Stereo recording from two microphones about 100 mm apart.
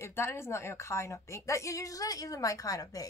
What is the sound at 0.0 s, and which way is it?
A woman's voice, 25° left (ahead or behind).